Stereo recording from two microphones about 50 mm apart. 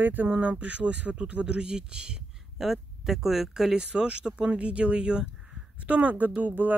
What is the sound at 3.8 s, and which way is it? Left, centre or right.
Speech, centre.